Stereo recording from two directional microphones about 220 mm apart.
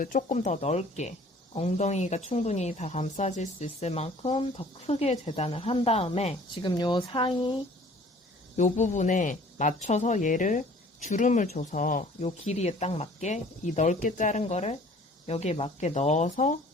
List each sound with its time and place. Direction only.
0.0 s a woman's voice: 35° left (ahead or behind); by 7.5 s 20° left (ahead or behind)
8.5 s speech: 35° left (ahead or behind)